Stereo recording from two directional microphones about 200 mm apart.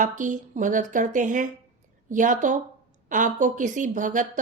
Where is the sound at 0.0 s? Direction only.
40° right (ahead or behind).